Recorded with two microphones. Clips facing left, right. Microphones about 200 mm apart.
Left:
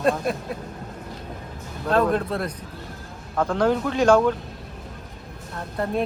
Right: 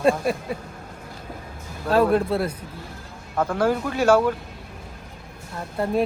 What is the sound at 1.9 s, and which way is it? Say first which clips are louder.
Speech: right 2 dB; 5° right (ahead or behind).